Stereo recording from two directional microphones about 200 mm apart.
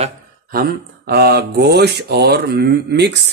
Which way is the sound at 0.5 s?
50° right (ahead or behind).